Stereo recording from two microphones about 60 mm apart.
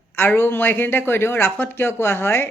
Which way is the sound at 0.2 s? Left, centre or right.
Left.